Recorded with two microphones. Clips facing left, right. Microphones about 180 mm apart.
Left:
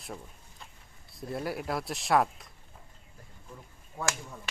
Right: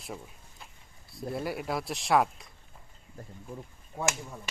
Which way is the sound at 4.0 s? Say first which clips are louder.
Right 2 dB; 20° right (ahead or behind).